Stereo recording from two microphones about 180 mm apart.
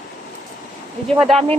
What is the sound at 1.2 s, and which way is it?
Speech, centre (ahead or behind).